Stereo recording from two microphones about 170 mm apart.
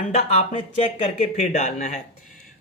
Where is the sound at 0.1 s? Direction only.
35° left (ahead or behind).